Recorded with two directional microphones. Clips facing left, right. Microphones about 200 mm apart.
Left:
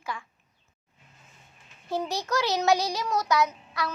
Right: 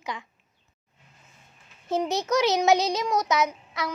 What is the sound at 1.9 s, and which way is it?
Speech, 20° right (ahead or behind).